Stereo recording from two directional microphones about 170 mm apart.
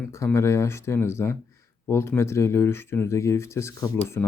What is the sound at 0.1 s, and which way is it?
Speech, 15° left (ahead or behind).